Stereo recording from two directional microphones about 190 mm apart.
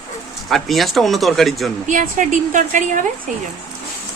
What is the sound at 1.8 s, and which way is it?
Speech, 45° right (ahead or behind).